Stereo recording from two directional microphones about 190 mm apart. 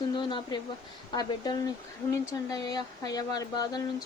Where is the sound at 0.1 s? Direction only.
25° left (ahead or behind).